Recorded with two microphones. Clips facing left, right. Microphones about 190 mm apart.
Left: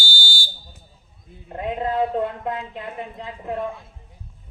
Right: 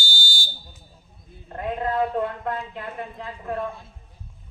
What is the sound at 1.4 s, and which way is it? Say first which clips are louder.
A woman's voice: left 1 dB; 20° left (ahead or behind).